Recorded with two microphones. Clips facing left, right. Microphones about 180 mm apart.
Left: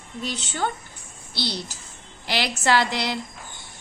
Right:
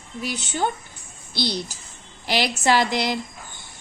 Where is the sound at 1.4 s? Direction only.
15° right (ahead or behind).